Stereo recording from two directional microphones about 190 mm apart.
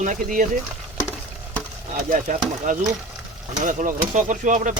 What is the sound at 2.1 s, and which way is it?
Speech, 45° right (ahead or behind).